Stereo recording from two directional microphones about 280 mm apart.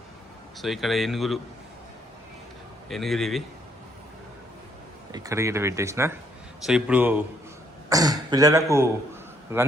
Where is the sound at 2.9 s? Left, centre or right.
Centre.